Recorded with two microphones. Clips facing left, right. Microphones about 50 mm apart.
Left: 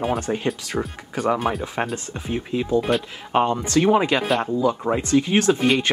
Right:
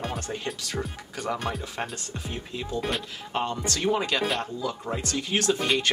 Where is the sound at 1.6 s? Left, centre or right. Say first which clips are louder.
Left 8 dB; left.